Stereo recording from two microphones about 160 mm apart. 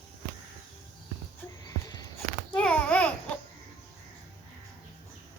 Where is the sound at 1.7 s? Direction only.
20° left (ahead or behind).